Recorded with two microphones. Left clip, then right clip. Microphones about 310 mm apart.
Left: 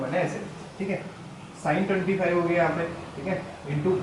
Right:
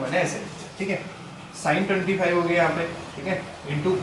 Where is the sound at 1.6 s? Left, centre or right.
Centre.